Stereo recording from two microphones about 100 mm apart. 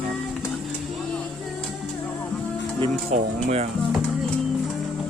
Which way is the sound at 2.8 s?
75° right (ahead or behind).